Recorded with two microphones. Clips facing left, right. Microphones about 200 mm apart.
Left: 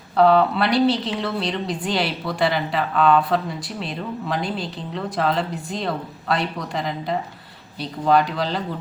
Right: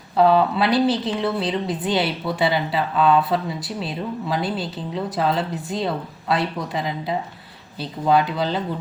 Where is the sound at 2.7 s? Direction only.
5° right (ahead or behind).